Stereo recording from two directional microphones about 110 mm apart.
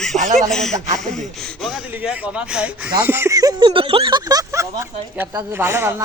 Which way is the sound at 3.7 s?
55° right (ahead or behind).